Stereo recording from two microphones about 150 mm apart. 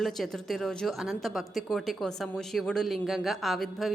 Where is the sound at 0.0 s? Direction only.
Centre (ahead or behind).